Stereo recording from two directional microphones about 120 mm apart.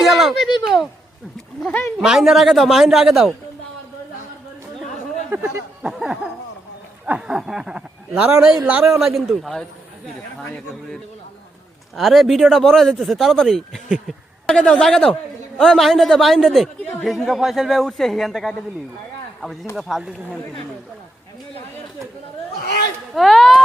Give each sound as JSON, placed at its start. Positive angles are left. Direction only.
{"t": 0.0, "sound": "a sound", "side_deg": 0}
{"t": 2.0, "sound": "a man's voice", "side_deg": 0}
{"t": 5.3, "sound": "speech", "side_deg": -20}
{"t": 5.8, "sound": "a man's voice", "side_deg": -5}
{"t": 11.9, "sound": "a man's voice", "side_deg": 0}
{"t": 19.7, "sound": "a man's voice", "side_deg": -5}
{"t": 23.1, "sound": "a man's voice", "side_deg": 0}